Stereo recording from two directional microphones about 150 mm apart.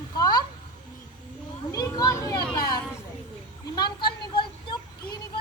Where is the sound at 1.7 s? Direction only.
20° left (ahead or behind).